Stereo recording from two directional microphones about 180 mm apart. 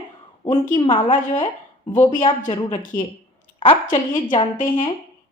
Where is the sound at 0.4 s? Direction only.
35° left (ahead or behind).